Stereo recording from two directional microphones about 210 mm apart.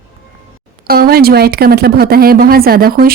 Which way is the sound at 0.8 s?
45° right (ahead or behind).